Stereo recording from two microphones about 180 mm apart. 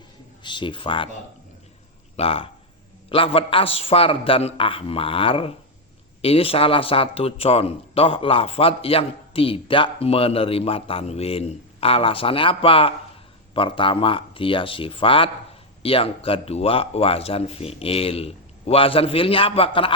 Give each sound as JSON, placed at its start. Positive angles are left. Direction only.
{"t": 0.4, "sound": "speech", "side_deg": 25}
{"t": 2.1, "sound": "speech", "side_deg": 30}